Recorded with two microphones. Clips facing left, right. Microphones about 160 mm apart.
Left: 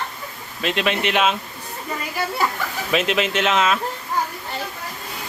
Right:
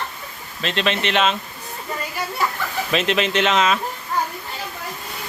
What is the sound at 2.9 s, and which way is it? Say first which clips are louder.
Speech: even; 5° left (ahead or behind).